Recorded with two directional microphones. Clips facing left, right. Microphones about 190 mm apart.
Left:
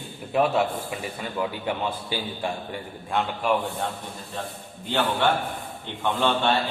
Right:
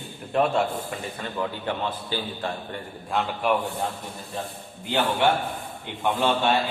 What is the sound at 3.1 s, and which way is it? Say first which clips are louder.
Speech: even; centre (ahead or behind).